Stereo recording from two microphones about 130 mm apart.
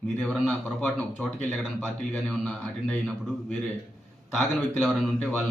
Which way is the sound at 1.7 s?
5° left (ahead or behind).